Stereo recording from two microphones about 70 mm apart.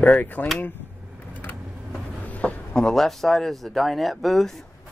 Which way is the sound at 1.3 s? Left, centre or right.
Left.